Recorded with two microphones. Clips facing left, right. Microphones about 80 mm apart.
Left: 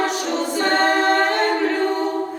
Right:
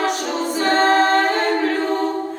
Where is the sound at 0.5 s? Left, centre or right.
Centre.